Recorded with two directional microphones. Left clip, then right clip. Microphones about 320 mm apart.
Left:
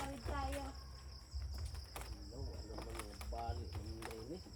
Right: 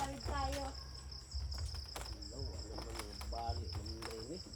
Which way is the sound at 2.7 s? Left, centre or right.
Centre.